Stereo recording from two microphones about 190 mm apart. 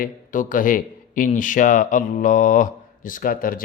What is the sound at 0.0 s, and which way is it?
Speech, 45° left (ahead or behind).